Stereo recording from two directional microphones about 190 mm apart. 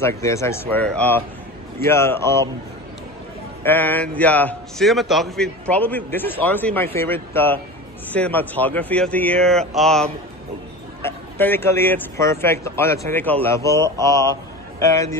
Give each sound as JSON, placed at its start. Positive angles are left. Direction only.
{"t": 0.0, "sound": "a man's voice", "side_deg": 15}
{"t": 3.6, "sound": "a man's voice", "side_deg": 10}